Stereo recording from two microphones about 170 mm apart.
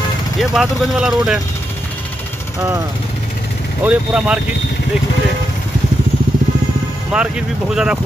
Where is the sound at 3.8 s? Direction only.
10° right (ahead or behind).